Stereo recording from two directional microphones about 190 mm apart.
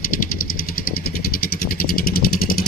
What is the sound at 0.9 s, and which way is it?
Vehicle, 50° left (ahead or behind).